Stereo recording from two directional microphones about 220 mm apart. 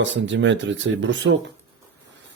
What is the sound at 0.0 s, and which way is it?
Speech, 55° right (ahead or behind).